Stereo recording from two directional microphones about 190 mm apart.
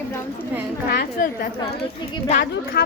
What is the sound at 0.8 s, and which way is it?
A woman's voice, 55° left (ahead or behind).